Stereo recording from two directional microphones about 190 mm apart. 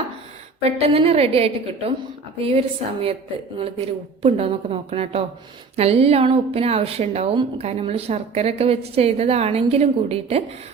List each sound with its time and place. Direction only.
0.8 s a woman's voice: 30° right (ahead or behind)